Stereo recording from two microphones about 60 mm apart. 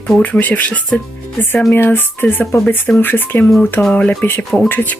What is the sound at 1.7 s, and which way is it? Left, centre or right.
Speech, left.